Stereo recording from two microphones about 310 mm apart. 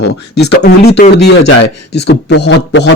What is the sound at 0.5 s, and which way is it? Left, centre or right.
A man's voice, left.